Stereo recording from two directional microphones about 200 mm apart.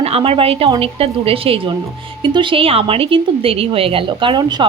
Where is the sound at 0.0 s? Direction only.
30° right (ahead or behind).